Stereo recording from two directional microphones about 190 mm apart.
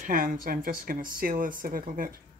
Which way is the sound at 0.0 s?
45° right (ahead or behind).